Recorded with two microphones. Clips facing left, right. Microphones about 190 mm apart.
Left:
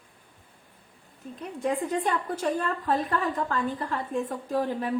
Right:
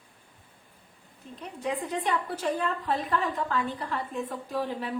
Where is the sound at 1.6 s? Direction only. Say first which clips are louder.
Left 3 dB; 45° left (ahead or behind).